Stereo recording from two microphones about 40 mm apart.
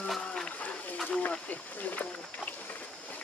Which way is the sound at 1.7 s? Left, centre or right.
Left.